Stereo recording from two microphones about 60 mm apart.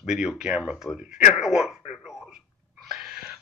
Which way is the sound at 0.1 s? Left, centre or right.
Centre.